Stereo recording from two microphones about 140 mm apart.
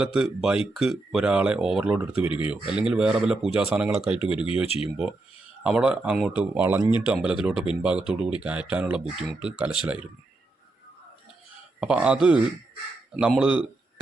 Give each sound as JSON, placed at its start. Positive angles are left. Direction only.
{"t": 0.0, "sound": "speech", "side_deg": -5}
{"t": 2.2, "sound": "speech", "side_deg": 40}
{"t": 2.5, "sound": "speech", "side_deg": -5}
{"t": 5.6, "sound": "speech", "side_deg": -5}
{"t": 11.8, "sound": "speech", "side_deg": -5}